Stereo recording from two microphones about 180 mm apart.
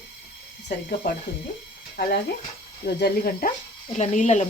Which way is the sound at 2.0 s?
60° left (ahead or behind).